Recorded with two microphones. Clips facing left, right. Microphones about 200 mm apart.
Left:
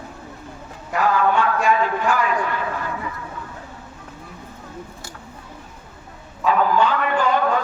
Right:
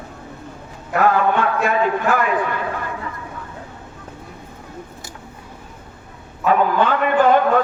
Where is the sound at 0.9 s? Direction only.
55° right (ahead or behind).